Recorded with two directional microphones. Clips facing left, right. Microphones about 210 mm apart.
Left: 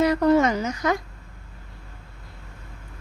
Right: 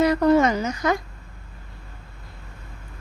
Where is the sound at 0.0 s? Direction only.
35° right (ahead or behind).